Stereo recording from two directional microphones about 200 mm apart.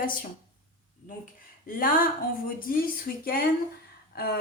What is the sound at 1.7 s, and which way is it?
Speech, 45° left (ahead or behind).